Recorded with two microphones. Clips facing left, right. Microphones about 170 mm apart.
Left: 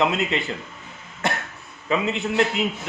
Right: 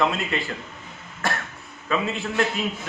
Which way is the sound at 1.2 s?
20° left (ahead or behind).